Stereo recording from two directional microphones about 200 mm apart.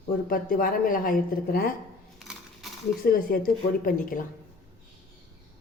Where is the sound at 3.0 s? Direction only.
45° left (ahead or behind).